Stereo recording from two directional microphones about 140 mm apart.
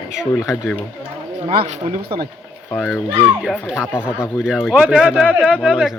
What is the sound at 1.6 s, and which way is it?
Speech, 50° right (ahead or behind).